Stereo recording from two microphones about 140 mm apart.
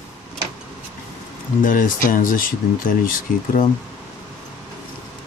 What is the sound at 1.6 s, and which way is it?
Speech, 75° left (ahead or behind).